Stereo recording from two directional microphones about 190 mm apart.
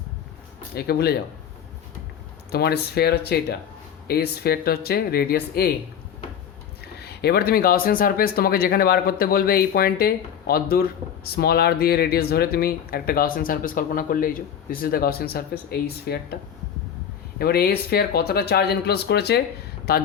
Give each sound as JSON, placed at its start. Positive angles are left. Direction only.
{"t": 0.7, "sound": "speech", "side_deg": 55}
{"t": 2.5, "sound": "speech", "side_deg": 55}
{"t": 6.8, "sound": "speech", "side_deg": 60}